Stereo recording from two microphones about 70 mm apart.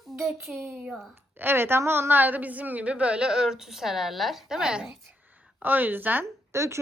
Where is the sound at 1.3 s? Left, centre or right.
Right; by 4.9 s centre.